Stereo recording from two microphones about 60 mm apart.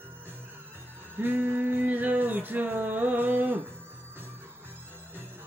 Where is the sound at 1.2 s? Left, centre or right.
Right.